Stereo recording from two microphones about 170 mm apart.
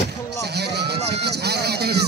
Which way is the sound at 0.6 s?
75° right (ahead or behind).